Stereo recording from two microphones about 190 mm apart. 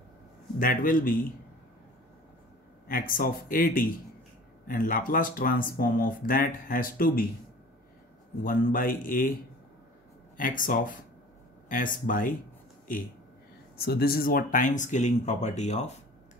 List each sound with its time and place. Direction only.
0.6 s speech: 45° left (ahead or behind)
2.9 s speech: 50° left (ahead or behind)
8.5 s speech: 50° left (ahead or behind)
10.3 s speech: 45° left (ahead or behind)